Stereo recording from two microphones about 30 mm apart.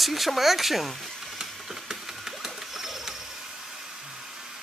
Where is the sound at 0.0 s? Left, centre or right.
Centre.